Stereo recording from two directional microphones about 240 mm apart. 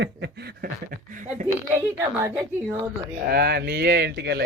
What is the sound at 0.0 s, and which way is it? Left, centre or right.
A woman's voice, right.